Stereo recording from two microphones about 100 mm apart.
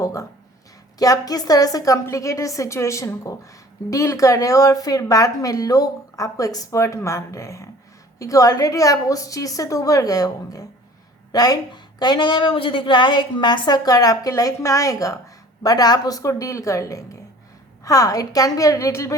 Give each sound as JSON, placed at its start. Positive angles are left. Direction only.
{"t": 0.0, "sound": "a woman's voice", "side_deg": 30}